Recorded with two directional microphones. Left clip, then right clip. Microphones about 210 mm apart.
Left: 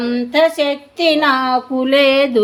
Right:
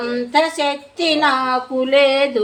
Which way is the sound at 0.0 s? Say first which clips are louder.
Left 3 dB; 40° left (ahead or behind).